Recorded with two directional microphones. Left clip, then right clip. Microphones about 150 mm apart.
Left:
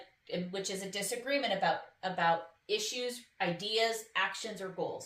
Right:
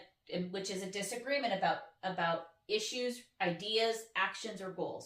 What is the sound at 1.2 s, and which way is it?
A woman's voice, 30° left (ahead or behind).